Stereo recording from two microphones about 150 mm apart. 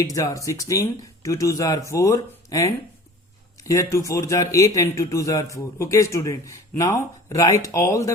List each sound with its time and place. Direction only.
0.0 s a man's voice: 25° left (ahead or behind)